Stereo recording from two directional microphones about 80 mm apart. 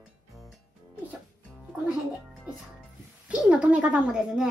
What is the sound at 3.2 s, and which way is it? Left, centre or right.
Speech, centre.